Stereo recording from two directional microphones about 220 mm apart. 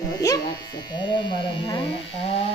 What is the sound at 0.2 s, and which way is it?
Speech, 15° left (ahead or behind).